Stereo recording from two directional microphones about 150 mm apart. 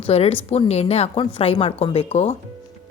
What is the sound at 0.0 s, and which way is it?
Speech, 40° left (ahead or behind).